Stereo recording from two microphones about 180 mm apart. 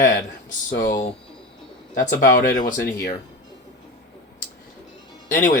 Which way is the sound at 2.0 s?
50° left (ahead or behind).